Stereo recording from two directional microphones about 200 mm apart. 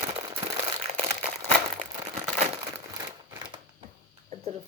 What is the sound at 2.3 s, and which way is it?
Crumpling, 35° right (ahead or behind).